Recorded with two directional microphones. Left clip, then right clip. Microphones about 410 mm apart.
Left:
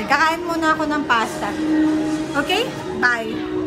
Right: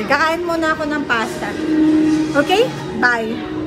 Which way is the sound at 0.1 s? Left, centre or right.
Centre.